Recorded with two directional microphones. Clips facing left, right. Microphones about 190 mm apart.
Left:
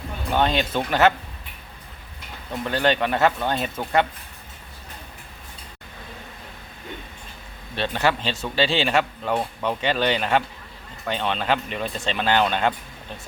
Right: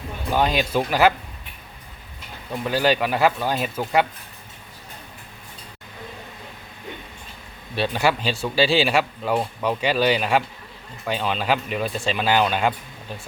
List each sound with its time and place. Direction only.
0.3 s speech: 10° right (ahead or behind)
2.6 s speech: 10° right (ahead or behind)
7.8 s speech: 10° right (ahead or behind)